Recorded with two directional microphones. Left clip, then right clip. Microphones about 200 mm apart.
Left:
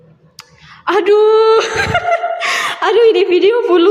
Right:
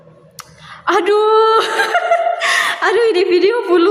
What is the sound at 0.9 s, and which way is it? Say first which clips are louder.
Speech: left 2 dB; centre (ahead or behind).